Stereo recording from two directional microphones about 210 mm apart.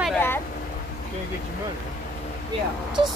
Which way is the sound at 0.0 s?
5° left (ahead or behind).